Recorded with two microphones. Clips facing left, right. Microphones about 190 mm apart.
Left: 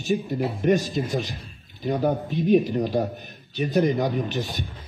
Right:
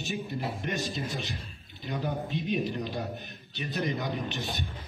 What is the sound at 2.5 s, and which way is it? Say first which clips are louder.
A man's voice: left 13 dB; 45° left (ahead or behind).